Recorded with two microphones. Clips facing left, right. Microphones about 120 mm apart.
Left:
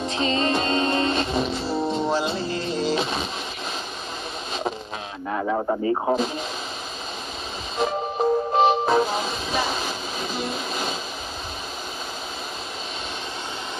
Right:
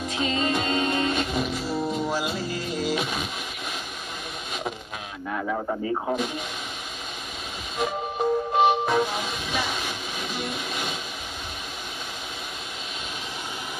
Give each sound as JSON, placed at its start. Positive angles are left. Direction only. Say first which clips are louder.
{"t": 0.2, "sound": "music", "louder": "left 3 dB", "side_deg": -10}
{"t": 0.5, "sound": "music", "louder": "left 3 dB", "side_deg": 30}
{"t": 5.3, "sound": "speech", "louder": "left 4 dB", "side_deg": 20}
{"t": 7.7, "sound": "music", "louder": "left 3 dB", "side_deg": 30}